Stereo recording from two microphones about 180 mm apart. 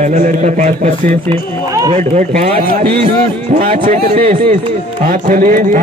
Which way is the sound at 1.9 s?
40° right (ahead or behind).